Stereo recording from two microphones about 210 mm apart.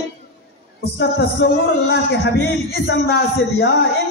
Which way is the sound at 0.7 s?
50° left (ahead or behind).